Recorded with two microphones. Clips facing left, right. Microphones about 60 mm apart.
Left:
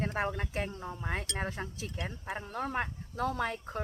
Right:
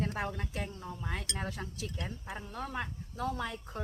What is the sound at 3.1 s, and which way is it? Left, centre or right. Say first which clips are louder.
Speech: left 3 dB; left.